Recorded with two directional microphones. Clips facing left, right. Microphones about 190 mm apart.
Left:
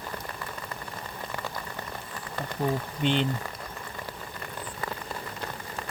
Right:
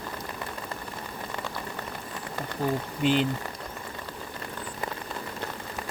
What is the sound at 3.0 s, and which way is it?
Speech, 5° right (ahead or behind).